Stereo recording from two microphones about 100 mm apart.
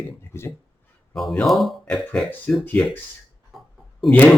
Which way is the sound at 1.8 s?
15° left (ahead or behind).